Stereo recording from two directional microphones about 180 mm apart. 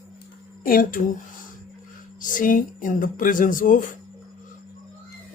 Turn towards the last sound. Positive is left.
turn(degrees=50)  # may be behind; listen again after turning